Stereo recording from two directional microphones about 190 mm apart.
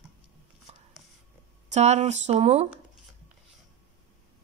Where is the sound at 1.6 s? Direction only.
35° right (ahead or behind).